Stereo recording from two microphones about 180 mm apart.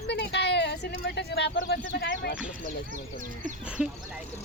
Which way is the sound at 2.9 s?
45° right (ahead or behind).